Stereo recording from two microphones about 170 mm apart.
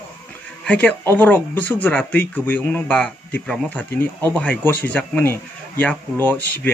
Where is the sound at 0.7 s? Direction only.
10° left (ahead or behind).